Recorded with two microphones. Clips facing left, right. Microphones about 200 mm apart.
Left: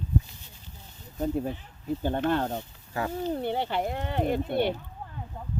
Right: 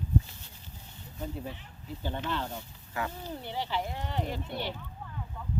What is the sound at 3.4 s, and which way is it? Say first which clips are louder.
Speech: left 6 dB; 55° left (ahead or behind).